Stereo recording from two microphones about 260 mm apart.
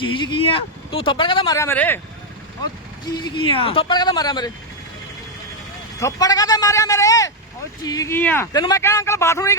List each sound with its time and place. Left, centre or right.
0.0 s speech: centre
3.2 s speech: centre
6.0 s speech: centre